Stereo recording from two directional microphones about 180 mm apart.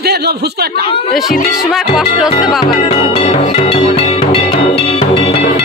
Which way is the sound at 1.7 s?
Centre (ahead or behind).